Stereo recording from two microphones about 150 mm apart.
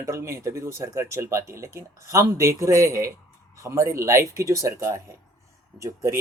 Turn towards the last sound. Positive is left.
turn(degrees=-20)  # may be behind; listen again after turning